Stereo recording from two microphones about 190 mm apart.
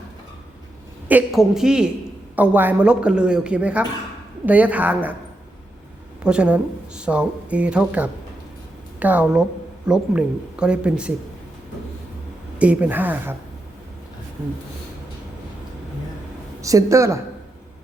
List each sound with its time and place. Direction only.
1.0 s a woman's voice: 5° right (ahead or behind)
6.2 s a woman's voice: 5° right (ahead or behind)
12.5 s speech: 5° right (ahead or behind)
14.4 s speech: 10° right (ahead or behind)
16.6 s speech: 15° right (ahead or behind)